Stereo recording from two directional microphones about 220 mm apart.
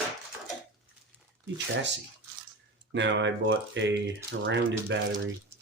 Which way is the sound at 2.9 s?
55° right (ahead or behind).